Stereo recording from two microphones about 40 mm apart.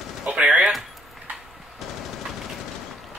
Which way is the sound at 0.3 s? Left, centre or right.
Right.